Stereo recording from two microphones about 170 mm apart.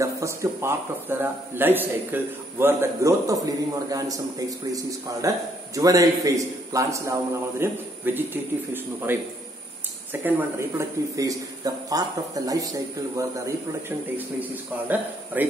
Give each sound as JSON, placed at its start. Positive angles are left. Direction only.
{"t": 0.0, "sound": "a man's voice", "side_deg": -15}